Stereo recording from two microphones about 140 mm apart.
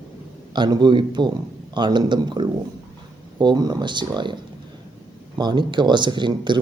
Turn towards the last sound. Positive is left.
turn(degrees=-35)  # may be behind; listen again after turning